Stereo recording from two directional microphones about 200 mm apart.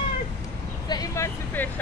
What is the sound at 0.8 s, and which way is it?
Vehicle, 20° left (ahead or behind).